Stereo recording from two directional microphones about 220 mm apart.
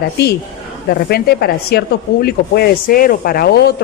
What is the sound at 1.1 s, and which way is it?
A woman's voice, 45° left (ahead or behind).